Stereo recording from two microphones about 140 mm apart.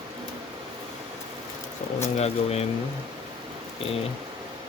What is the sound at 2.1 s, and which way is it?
Speech, 50° left (ahead or behind).